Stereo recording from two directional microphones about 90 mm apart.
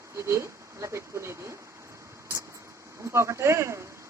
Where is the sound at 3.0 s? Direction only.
30° right (ahead or behind).